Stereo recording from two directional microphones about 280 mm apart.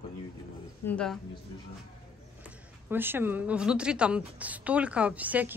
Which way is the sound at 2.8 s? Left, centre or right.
Centre.